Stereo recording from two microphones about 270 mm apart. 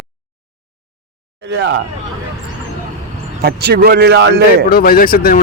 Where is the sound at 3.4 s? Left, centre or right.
Right.